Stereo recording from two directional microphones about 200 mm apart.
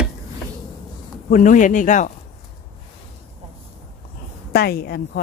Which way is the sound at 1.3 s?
40° left (ahead or behind).